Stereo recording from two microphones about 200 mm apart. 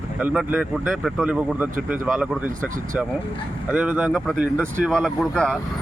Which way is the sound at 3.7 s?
5° right (ahead or behind).